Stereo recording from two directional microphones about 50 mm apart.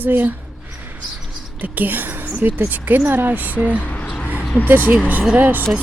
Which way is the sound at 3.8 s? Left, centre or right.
Left.